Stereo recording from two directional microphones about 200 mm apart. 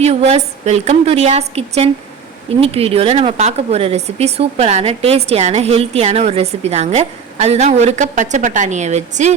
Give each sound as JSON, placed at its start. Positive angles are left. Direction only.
{"t": 0.0, "sound": "speech", "side_deg": -35}